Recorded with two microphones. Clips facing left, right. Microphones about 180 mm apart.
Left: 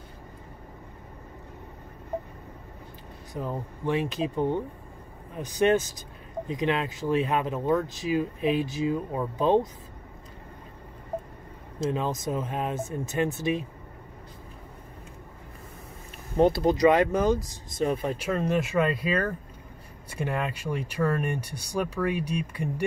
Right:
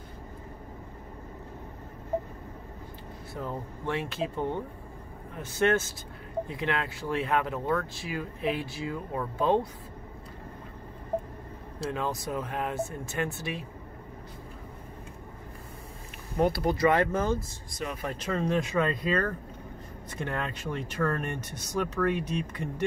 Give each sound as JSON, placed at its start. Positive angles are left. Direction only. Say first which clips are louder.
{"t": 3.3, "sound": "speech", "louder": "left 3 dB", "side_deg": 15}
{"t": 11.8, "sound": "speech", "louder": "left 4 dB", "side_deg": 20}
{"t": 16.3, "sound": "speech", "louder": "left 5 dB", "side_deg": 25}